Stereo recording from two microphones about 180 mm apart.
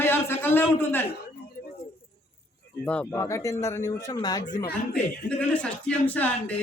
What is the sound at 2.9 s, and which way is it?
Speech, 10° left (ahead or behind).